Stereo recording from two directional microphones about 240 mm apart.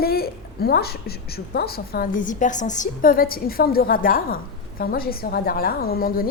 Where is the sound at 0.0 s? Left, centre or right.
Left.